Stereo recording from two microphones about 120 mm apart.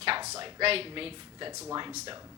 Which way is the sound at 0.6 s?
55° right (ahead or behind).